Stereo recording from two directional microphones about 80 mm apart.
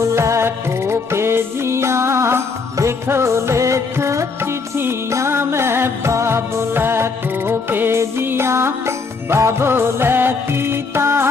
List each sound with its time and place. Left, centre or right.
0.0 s music: right